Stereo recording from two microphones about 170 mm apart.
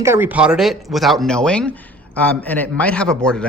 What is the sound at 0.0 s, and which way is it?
A man's voice, 15° right (ahead or behind).